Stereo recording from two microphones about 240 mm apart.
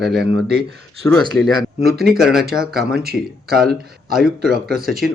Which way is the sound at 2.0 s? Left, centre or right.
Centre.